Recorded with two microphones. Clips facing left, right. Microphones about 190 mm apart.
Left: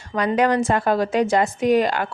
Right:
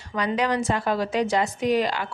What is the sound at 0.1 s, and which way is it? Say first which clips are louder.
A woman's voice: left 5 dB; 50° left (ahead or behind).